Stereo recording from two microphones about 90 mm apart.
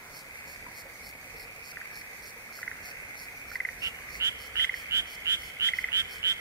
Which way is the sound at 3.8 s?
35° right (ahead or behind).